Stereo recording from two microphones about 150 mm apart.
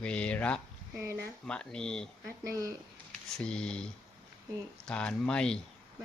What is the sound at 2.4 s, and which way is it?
Speech, 20° right (ahead or behind).